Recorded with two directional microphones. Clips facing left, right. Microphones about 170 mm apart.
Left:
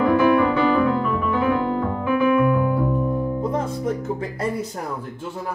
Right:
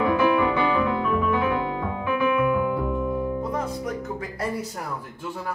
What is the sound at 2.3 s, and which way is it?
Music, 15° right (ahead or behind).